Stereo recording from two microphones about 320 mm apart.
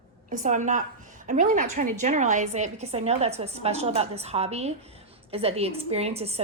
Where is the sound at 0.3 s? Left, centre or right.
Right.